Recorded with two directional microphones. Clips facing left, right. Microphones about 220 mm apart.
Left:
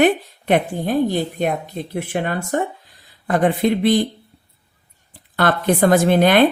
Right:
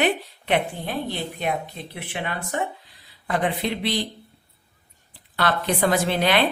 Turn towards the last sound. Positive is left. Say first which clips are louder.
# left 8 dB
turn(degrees=50)  # may be behind; listen again after turning